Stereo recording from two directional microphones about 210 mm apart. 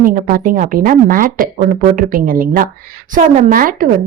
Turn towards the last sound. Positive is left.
turn(degrees=-40)  # may be behind; listen again after turning